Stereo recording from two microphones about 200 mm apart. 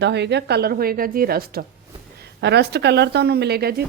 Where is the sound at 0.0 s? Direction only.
60° right (ahead or behind).